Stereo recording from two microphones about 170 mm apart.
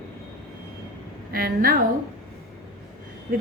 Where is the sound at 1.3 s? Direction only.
60° right (ahead or behind).